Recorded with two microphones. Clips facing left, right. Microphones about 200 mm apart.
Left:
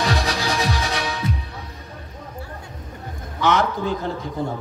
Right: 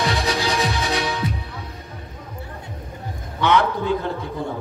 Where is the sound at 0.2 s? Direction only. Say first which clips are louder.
Right 1 dB; 55° right (ahead or behind).